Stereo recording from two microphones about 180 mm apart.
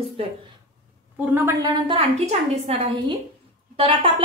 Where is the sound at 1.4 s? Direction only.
15° right (ahead or behind).